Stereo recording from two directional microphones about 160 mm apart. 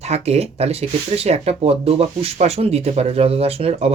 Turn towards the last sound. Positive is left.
turn(degrees=-40)  # may be behind; listen again after turning